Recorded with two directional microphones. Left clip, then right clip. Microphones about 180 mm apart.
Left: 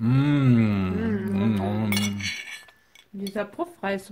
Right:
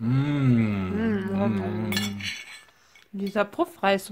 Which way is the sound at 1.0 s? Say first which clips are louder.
Right 1 dB; 35° right (ahead or behind).